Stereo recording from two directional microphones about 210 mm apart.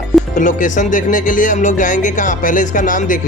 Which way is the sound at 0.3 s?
40° left (ahead or behind).